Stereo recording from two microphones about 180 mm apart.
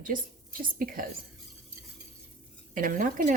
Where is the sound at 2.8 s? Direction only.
50° right (ahead or behind).